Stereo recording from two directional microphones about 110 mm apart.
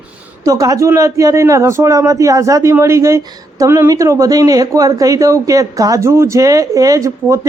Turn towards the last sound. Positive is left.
turn(degrees=-30)  # may be behind; listen again after turning